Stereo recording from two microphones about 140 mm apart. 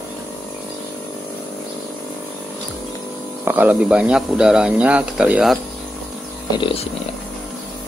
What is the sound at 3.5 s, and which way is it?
Speech, 10° right (ahead or behind).